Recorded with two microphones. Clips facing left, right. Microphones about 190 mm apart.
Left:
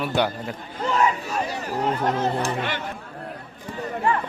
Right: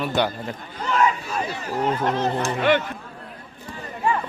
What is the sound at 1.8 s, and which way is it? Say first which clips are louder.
Speech: right 1 dB; 10° left (ahead or behind).